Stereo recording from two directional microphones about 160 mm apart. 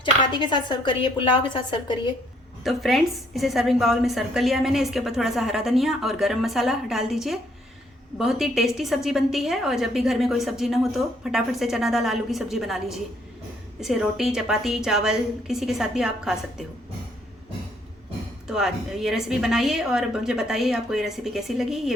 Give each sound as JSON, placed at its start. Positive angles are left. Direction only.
{"t": 0.0, "sound": "speech", "side_deg": 30}
{"t": 2.6, "sound": "a woman's voice", "side_deg": 0}
{"t": 18.4, "sound": "a woman's voice", "side_deg": -5}